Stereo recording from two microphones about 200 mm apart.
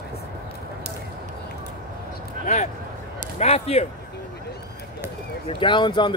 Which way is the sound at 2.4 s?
35° left (ahead or behind).